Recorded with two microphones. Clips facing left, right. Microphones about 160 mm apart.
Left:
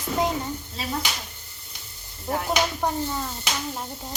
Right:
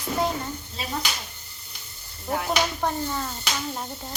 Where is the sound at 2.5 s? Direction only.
5° left (ahead or behind).